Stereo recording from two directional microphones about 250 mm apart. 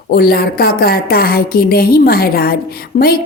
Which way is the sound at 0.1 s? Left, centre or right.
Left.